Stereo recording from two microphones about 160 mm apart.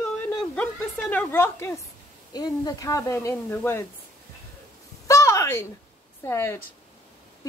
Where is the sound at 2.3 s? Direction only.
25° left (ahead or behind).